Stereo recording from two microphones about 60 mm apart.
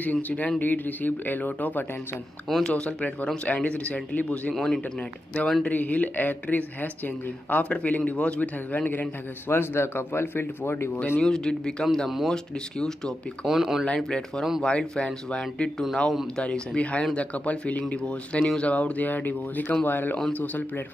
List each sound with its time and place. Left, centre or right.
0.0 s speech: left
2.4 s speech: centre
2.7 s speech: left
4.6 s speech: centre
5.7 s speech: left
9.5 s speech: left
11.2 s speech: centre
13.5 s speech: centre
13.8 s speech: centre